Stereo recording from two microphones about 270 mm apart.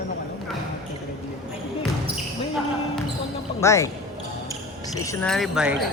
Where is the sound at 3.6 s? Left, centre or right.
Centre.